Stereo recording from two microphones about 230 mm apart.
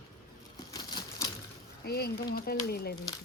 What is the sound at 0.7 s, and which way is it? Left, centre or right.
Crumpling, centre.